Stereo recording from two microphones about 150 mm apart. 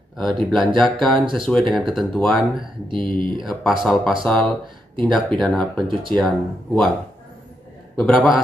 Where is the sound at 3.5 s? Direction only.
10° left (ahead or behind).